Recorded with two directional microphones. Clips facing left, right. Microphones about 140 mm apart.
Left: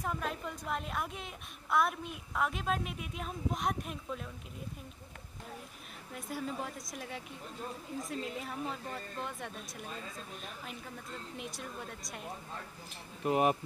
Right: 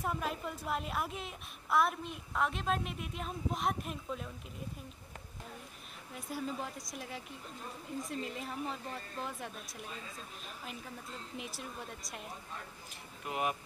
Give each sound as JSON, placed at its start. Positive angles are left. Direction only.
{"t": 0.0, "sound": "a woman's voice", "side_deg": -5}
{"t": 6.1, "sound": "a woman's voice", "side_deg": 0}
{"t": 11.3, "sound": "a woman's voice", "side_deg": 0}
{"t": 13.2, "sound": "speech", "side_deg": 40}